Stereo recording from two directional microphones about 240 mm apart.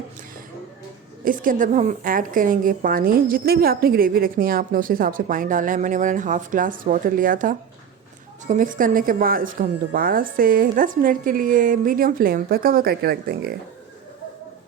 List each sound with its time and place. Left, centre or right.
1.2 s a woman's voice: right